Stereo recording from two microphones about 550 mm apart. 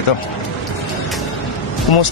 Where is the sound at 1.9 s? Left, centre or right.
Left.